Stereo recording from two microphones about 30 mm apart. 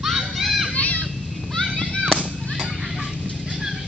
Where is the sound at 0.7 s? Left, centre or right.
Left.